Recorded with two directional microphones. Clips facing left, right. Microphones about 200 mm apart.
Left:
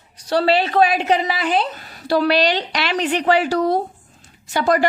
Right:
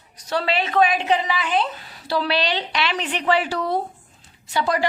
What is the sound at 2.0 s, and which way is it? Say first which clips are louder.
A woman's voice: left 6 dB; 45° left (ahead or behind).